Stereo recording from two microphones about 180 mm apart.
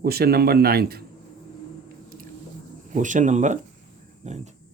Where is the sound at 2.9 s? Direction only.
45° right (ahead or behind).